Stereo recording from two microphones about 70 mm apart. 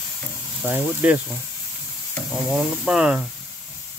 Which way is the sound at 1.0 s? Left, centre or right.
Right.